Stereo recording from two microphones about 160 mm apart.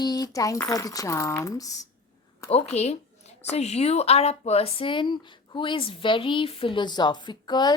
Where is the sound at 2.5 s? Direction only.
40° left (ahead or behind).